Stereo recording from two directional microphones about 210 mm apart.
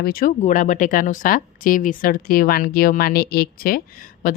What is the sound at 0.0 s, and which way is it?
Speech, 45° left (ahead or behind).